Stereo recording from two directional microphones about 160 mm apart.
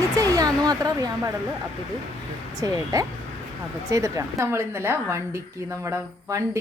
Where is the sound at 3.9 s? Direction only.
20° right (ahead or behind).